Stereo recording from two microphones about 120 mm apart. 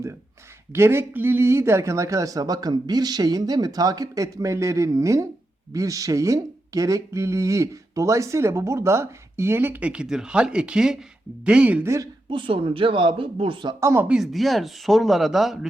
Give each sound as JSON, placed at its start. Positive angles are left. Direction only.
{"t": 0.7, "sound": "speech", "side_deg": -20}
{"t": 12.3, "sound": "speech", "side_deg": -45}
{"t": 13.7, "sound": "speech", "side_deg": -20}
{"t": 14.1, "sound": "speech", "side_deg": 0}